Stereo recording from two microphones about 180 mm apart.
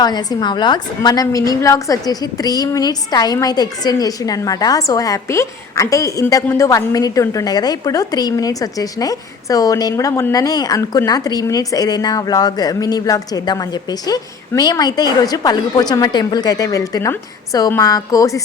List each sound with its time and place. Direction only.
0.0 s a woman's voice: 20° left (ahead or behind)